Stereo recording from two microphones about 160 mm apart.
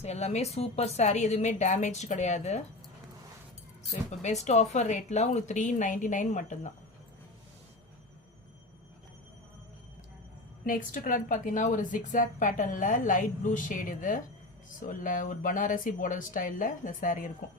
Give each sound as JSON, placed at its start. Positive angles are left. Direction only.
{"t": 0.0, "sound": "a woman's voice", "side_deg": 40}
{"t": 4.2, "sound": "a woman's voice", "side_deg": 45}
{"t": 10.7, "sound": "a woman's voice", "side_deg": 55}